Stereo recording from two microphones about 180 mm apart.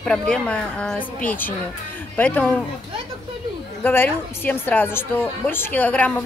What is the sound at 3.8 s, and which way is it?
A woman's voice, 10° left (ahead or behind).